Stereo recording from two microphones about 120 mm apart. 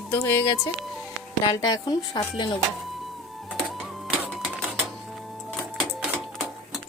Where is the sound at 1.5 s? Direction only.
30° left (ahead or behind).